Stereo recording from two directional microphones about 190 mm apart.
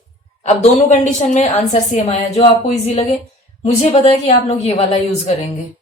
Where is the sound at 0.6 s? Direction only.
35° left (ahead or behind).